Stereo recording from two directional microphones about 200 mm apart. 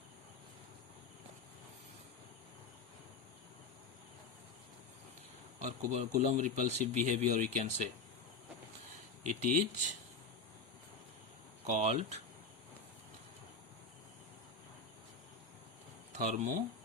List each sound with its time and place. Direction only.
5.5 s speech: 35° right (ahead or behind)
9.2 s speech: 40° right (ahead or behind)
11.6 s speech: 35° right (ahead or behind)
16.1 s speech: 40° right (ahead or behind)